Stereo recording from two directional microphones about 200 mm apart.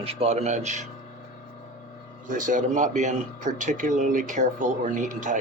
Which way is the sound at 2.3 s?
40° right (ahead or behind).